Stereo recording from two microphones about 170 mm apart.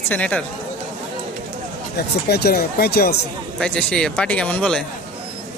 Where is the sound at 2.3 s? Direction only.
70° left (ahead or behind).